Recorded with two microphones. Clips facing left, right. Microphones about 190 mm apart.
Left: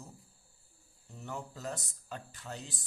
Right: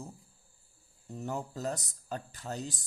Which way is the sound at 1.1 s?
40° right (ahead or behind).